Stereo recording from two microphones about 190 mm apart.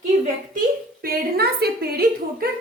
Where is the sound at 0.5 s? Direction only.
50° right (ahead or behind).